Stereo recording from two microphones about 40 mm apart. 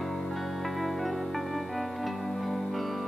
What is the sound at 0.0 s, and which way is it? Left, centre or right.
Music, centre.